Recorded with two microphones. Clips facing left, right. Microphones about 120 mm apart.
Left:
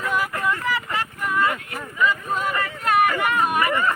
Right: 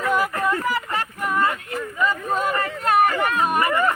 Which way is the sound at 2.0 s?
40° right (ahead or behind).